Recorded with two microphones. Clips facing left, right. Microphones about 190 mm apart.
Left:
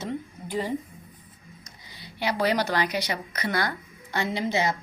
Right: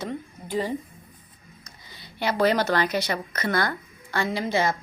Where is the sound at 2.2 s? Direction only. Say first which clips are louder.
Right 3 dB; 15° left (ahead or behind).